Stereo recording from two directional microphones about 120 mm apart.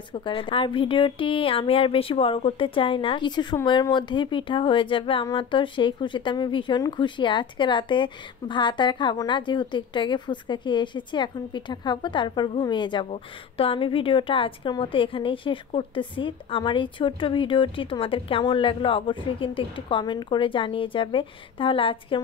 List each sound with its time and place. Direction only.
0.1 s a woman's voice: 45° left (ahead or behind)
13.1 s a woman's voice: 50° left (ahead or behind)